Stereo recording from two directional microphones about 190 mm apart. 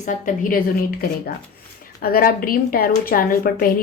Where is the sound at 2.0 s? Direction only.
50° left (ahead or behind).